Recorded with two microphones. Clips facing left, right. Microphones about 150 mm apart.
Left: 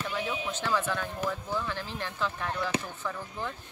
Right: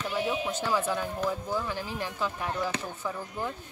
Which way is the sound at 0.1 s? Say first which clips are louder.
Right 3 dB; 10° right (ahead or behind).